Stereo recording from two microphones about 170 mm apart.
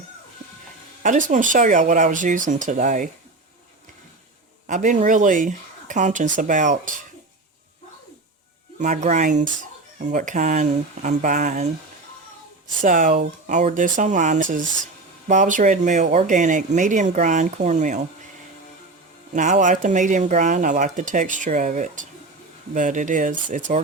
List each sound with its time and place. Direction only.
1.0 s speech: 50° right (ahead or behind)
4.6 s speech: 45° right (ahead or behind)
8.8 s speech: 45° right (ahead or behind)
12.8 s speech: 50° right (ahead or behind)
19.3 s speech: 45° right (ahead or behind)